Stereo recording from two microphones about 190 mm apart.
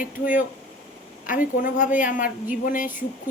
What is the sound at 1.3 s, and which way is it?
A woman's voice, 45° left (ahead or behind).